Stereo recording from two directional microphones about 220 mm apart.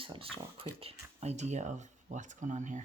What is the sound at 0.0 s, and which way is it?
Speech, 25° right (ahead or behind).